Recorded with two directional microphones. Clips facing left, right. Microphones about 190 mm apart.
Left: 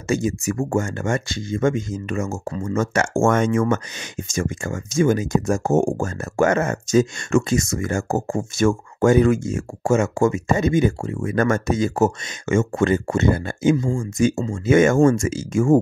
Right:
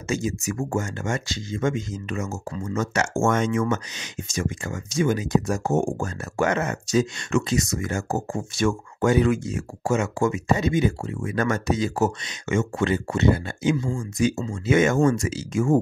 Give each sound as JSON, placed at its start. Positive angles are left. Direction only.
{"t": 0.1, "sound": "speech", "side_deg": 55}